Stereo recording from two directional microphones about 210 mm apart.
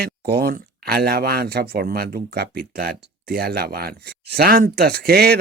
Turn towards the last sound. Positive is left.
turn(degrees=-45)  # may be behind; listen again after turning